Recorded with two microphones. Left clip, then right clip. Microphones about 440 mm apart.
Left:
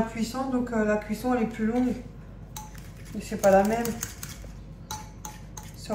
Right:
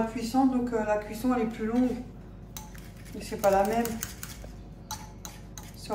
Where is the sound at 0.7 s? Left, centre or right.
Centre.